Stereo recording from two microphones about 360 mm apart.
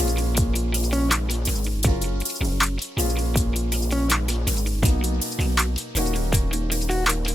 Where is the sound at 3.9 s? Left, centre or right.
Centre.